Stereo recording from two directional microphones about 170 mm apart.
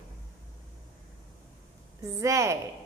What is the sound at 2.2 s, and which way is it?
Speech, 15° right (ahead or behind).